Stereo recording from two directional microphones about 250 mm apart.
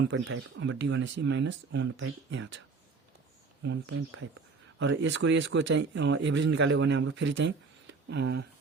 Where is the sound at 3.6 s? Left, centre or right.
Right.